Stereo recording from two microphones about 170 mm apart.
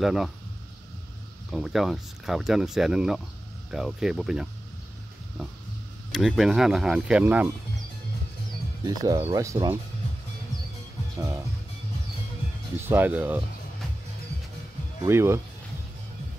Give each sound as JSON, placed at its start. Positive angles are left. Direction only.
{"t": 0.0, "sound": "speech", "side_deg": 0}
{"t": 1.5, "sound": "speech", "side_deg": 0}
{"t": 6.1, "sound": "speech", "side_deg": 0}
{"t": 8.8, "sound": "speech", "side_deg": -20}
{"t": 12.8, "sound": "speech", "side_deg": -10}
{"t": 15.0, "sound": "speech", "side_deg": -15}